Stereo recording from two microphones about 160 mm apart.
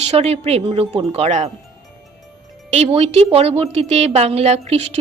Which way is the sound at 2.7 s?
40° right (ahead or behind).